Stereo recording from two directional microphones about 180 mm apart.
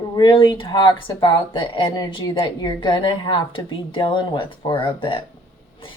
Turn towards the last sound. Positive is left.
turn(degrees=25)  # may be behind; listen again after turning